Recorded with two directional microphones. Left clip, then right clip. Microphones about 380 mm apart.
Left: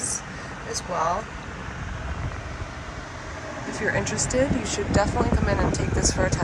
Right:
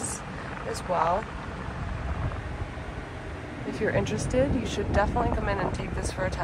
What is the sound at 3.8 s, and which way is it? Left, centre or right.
A woman's voice, centre.